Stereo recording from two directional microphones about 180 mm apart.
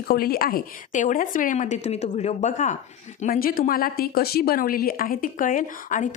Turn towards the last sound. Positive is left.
turn(degrees=45)  # may be behind; listen again after turning